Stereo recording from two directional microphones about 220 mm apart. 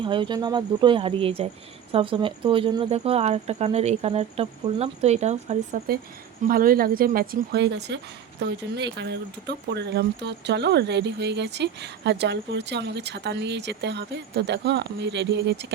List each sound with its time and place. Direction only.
0.0 s speech: 20° right (ahead or behind); by 15.6 s 50° right (ahead or behind)